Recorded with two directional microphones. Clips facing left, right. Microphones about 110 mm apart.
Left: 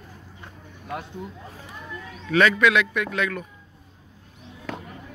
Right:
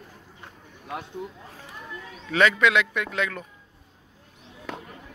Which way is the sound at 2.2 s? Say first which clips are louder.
Left 2 dB; 25° right (ahead or behind).